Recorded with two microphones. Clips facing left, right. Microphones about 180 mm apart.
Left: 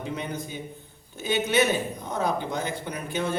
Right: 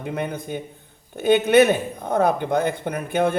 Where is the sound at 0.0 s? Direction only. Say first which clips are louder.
Right 5 dB; 55° right (ahead or behind).